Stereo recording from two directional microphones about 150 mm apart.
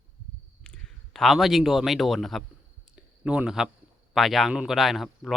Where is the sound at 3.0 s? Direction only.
5° right (ahead or behind).